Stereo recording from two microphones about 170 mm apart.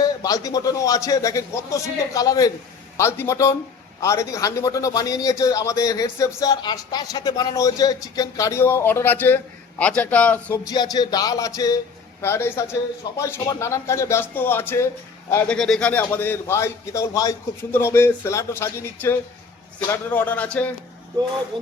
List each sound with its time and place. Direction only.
0.0 s a man's voice: 20° left (ahead or behind)
10.7 s a man's voice: 25° left (ahead or behind); by 20.7 s 10° left (ahead or behind)
21.5 s speech: 30° right (ahead or behind)